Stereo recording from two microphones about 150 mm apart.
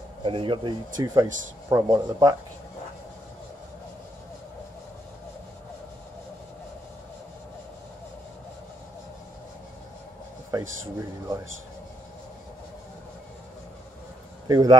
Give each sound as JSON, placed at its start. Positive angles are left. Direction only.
{"t": 0.2, "sound": "speech", "side_deg": -35}
{"t": 10.5, "sound": "speech", "side_deg": -20}
{"t": 14.5, "sound": "speech", "side_deg": -25}